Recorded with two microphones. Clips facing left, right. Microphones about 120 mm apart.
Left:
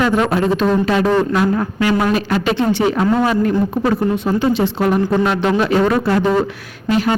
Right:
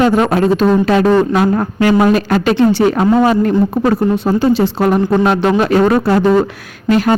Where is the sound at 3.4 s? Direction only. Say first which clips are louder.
Right 3 dB; 40° right (ahead or behind).